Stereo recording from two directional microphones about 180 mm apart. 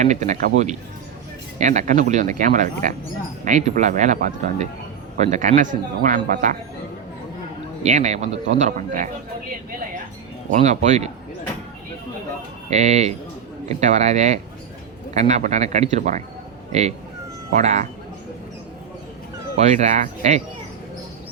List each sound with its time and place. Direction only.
0.0 s speech: 40° right (ahead or behind)
7.9 s speech: 40° right (ahead or behind)
10.5 s speech: 40° right (ahead or behind)
12.7 s speech: 40° right (ahead or behind)
17.5 s speech: 40° right (ahead or behind)
19.5 s speech: 40° right (ahead or behind)